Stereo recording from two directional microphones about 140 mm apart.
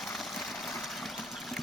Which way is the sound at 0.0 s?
Centre (ahead or behind).